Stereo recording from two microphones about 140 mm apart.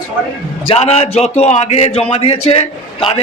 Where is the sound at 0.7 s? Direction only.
45° left (ahead or behind).